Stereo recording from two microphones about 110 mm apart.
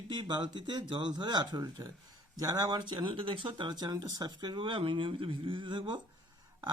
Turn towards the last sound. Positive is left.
turn(degrees=-45)  # may be behind; listen again after turning